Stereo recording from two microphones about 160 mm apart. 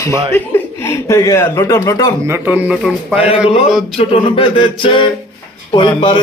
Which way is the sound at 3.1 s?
35° left (ahead or behind).